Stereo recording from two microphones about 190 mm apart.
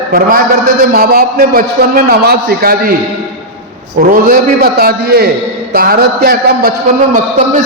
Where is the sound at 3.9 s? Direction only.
50° right (ahead or behind).